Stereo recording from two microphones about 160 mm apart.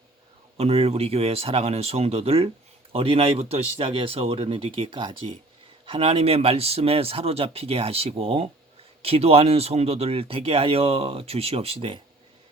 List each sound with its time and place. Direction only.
0.5 s speech: 40° right (ahead or behind)